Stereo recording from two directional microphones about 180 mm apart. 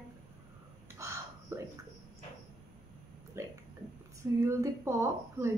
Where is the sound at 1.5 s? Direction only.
15° right (ahead or behind).